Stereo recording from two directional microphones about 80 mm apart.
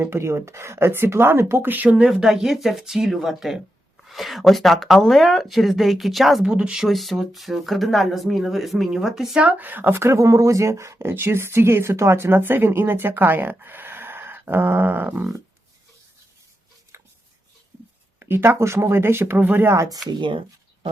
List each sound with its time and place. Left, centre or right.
0.0 s speech: right
2.0 s speech: centre
6.8 s speech: centre
9.4 s speech: right
16.9 s chopping: right
18.2 s speech: right
20.1 s speech: right